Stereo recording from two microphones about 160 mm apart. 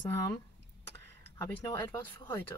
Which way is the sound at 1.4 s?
20° left (ahead or behind).